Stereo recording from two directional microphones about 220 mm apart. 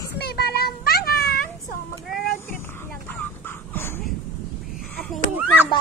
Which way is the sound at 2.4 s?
10° left (ahead or behind).